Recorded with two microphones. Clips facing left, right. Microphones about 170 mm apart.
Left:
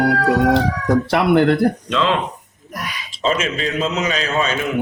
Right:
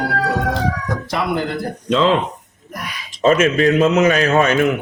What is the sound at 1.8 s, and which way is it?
Speech, 35° right (ahead or behind).